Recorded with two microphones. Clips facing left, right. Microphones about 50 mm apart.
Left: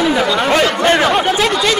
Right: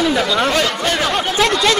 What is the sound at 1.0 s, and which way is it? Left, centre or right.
Speech, centre.